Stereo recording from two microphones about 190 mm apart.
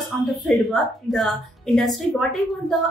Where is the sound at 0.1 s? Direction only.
Centre (ahead or behind).